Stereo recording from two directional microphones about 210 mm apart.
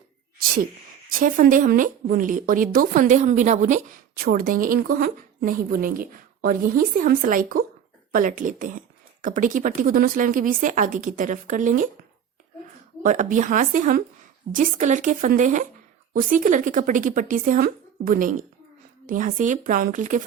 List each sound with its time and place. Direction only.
1.2 s a woman's voice: 40° right (ahead or behind)
13.0 s a woman's voice: 40° right (ahead or behind)